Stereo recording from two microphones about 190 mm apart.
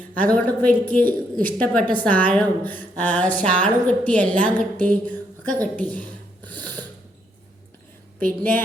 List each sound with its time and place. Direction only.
0.3 s speech: 10° left (ahead or behind)
8.2 s a woman's voice: 45° right (ahead or behind)